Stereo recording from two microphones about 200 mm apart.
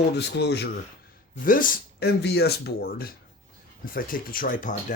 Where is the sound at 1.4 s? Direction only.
45° left (ahead or behind).